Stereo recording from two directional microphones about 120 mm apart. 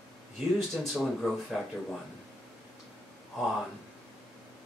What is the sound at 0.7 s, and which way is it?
Speech, centre (ahead or behind).